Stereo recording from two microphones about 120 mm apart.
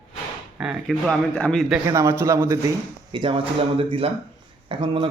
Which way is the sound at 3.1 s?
45° right (ahead or behind).